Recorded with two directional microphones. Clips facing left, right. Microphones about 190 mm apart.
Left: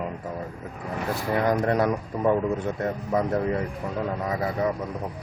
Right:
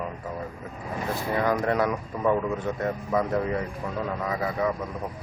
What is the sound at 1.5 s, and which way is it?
Speech, 30° left (ahead or behind).